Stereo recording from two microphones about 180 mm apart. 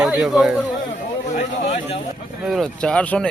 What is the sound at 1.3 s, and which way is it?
Speech, 40° left (ahead or behind).